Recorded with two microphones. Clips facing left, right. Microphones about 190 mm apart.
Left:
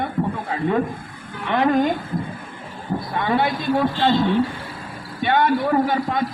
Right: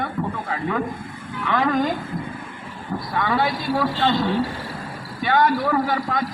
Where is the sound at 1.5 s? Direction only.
25° left (ahead or behind).